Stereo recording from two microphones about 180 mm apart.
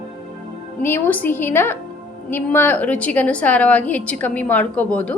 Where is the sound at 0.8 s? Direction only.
10° left (ahead or behind).